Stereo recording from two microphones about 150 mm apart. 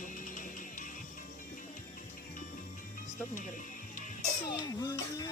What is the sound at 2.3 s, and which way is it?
Music, 60° left (ahead or behind).